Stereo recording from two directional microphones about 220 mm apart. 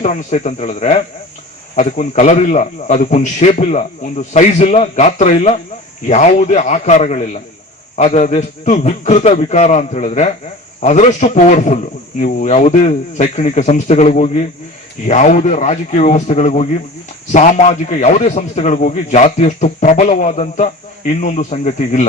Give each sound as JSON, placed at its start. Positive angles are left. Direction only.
{"t": 0.0, "sound": "speech", "side_deg": 30}